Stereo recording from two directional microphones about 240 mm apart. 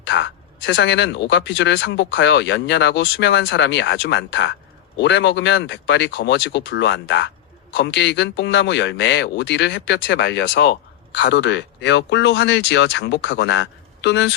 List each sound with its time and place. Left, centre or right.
0.0 s speech: left